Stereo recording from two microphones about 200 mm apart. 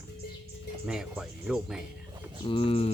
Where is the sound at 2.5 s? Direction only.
25° left (ahead or behind).